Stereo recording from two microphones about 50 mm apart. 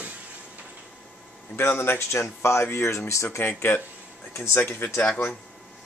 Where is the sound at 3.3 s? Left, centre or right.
Left.